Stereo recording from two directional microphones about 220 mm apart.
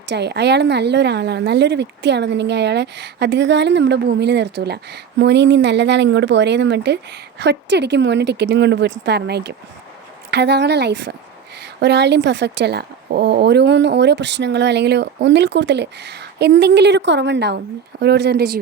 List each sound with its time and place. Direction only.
0.1 s a woman's voice: 50° right (ahead or behind)